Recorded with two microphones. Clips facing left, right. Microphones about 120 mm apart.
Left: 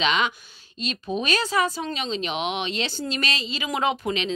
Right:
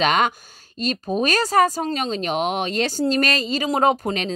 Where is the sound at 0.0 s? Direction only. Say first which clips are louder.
Right 5 dB; 50° right (ahead or behind).